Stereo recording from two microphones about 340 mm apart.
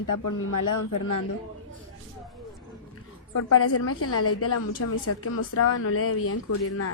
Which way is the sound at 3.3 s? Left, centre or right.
Left.